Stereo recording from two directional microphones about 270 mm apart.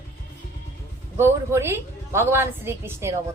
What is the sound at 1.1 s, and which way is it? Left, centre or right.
A woman's voice, centre.